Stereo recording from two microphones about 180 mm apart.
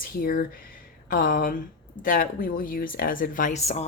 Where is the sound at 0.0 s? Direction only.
55° left (ahead or behind).